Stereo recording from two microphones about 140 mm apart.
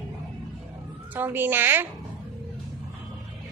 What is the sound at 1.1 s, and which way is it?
Speech, 15° right (ahead or behind).